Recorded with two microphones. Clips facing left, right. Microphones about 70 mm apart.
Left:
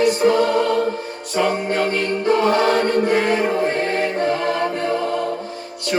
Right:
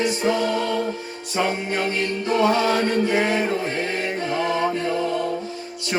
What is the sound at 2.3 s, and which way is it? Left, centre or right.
Music, left.